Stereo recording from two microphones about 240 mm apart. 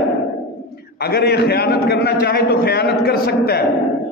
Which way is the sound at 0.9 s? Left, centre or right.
Left.